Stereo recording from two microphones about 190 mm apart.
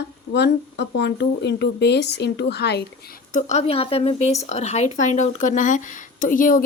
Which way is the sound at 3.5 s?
30° left (ahead or behind).